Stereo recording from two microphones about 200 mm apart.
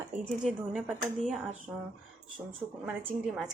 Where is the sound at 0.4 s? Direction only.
Centre (ahead or behind).